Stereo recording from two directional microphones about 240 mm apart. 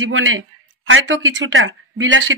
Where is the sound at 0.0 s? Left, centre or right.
Right.